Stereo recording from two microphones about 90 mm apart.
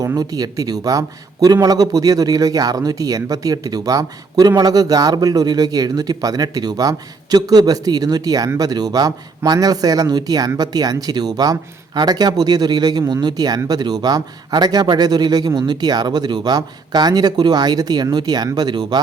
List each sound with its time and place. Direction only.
0.0 s speech: 40° right (ahead or behind)